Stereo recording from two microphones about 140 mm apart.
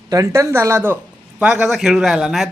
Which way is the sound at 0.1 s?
20° right (ahead or behind).